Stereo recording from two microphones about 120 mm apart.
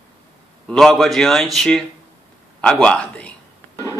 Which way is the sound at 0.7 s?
5° left (ahead or behind).